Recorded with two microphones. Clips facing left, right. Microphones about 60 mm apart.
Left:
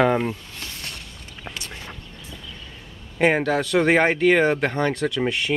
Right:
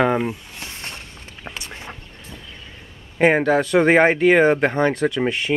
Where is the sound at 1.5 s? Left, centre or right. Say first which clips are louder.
Right 1 dB; centre.